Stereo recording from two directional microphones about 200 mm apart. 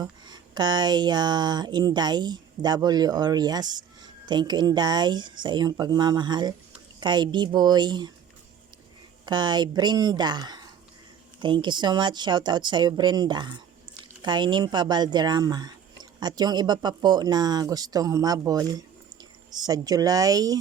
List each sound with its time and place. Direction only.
0.0 s speech: 20° right (ahead or behind)
9.2 s speech: 20° right (ahead or behind)